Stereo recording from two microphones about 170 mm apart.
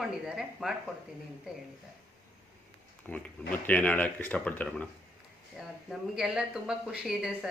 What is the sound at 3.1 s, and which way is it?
Speech, 10° left (ahead or behind).